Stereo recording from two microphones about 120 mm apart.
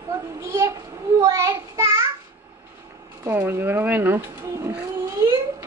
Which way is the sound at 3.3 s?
20° right (ahead or behind).